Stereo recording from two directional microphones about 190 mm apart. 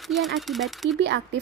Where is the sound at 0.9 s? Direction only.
70° right (ahead or behind).